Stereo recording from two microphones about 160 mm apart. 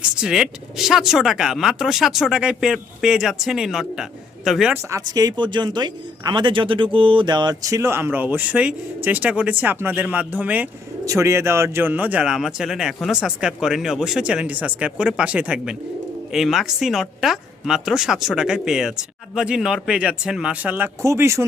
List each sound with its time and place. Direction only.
0.2 s speech: 5° right (ahead or behind)
4.7 s a man's voice: 20° right (ahead or behind)